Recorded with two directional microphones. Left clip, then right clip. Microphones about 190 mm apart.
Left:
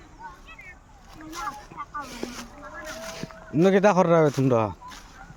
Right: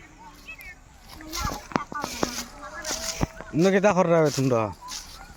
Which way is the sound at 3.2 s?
10° left (ahead or behind).